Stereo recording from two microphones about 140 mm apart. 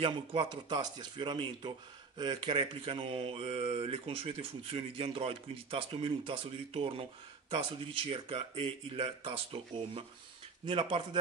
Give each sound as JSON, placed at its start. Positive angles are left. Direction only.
{"t": 0.0, "sound": "speech", "side_deg": -40}